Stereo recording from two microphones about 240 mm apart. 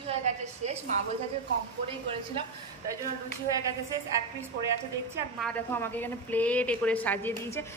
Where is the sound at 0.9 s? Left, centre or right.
Right.